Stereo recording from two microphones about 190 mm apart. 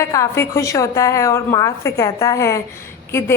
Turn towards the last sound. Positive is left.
turn(degrees=15)  # may be behind; listen again after turning